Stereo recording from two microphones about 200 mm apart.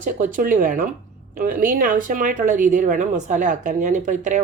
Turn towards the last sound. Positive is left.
turn(degrees=-40)  # may be behind; listen again after turning